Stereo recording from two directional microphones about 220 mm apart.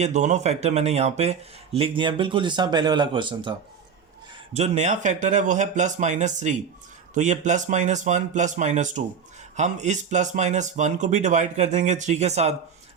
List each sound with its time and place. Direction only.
0.0 s speech: 30° right (ahead or behind)
4.5 s speech: 30° right (ahead or behind)